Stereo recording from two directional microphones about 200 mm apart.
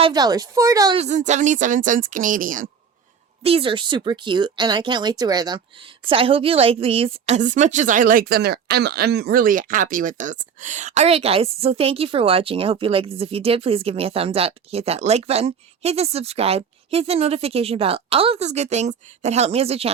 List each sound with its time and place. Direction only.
0.0 s speech: 20° right (ahead or behind)
0.9 s a woman's voice: 35° right (ahead or behind)
3.4 s a woman's voice: 25° right (ahead or behind)